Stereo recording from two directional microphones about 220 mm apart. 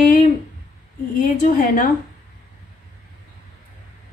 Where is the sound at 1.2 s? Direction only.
35° left (ahead or behind).